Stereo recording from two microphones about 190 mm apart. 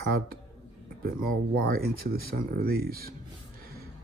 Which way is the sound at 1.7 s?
55° right (ahead or behind).